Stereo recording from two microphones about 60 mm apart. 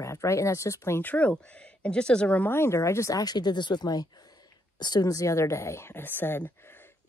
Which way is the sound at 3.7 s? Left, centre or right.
Left.